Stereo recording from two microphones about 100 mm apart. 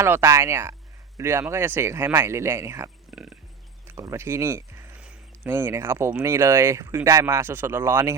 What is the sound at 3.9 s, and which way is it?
Speech, 30° right (ahead or behind).